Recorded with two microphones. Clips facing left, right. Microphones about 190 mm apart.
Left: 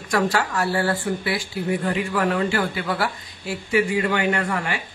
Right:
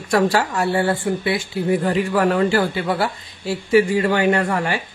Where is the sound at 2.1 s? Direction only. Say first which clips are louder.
Right 5 dB; 40° right (ahead or behind).